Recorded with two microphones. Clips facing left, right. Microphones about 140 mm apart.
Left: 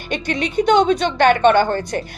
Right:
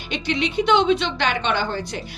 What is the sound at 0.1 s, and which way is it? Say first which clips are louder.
A woman's voice: left 2 dB; 50° left (ahead or behind).